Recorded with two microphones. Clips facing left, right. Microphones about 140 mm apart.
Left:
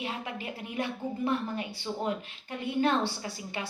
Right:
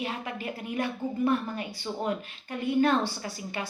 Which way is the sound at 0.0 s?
25° left (ahead or behind).